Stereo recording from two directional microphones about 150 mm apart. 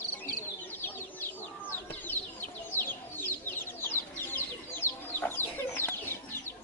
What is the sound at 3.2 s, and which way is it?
Chicken, 15° left (ahead or behind).